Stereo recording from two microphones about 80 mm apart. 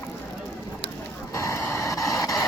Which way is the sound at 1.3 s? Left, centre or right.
Left.